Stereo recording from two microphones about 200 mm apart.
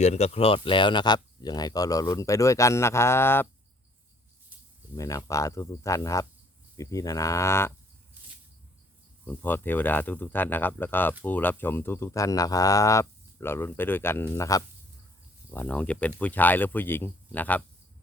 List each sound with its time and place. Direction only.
0.0 s speech: 35° left (ahead or behind); by 3.4 s 10° left (ahead or behind)
4.9 s speech: 15° left (ahead or behind)
9.2 s speech: 10° left (ahead or behind)